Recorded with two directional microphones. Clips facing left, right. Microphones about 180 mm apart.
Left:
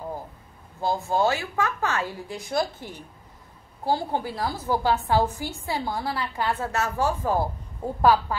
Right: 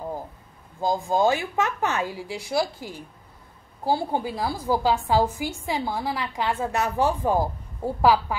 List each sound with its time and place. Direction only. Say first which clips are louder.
0.7 s a woman's voice: right 1 dB; 15° right (ahead or behind)